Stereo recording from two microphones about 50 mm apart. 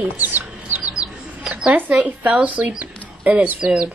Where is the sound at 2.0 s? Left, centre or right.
Right.